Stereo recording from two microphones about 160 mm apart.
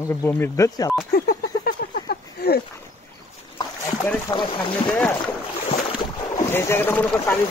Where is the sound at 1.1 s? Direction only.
65° left (ahead or behind).